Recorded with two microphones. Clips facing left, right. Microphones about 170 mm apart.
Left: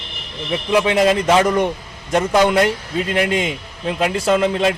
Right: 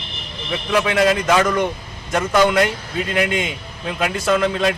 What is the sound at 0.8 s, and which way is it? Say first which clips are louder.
A man's voice: even; 25° left (ahead or behind).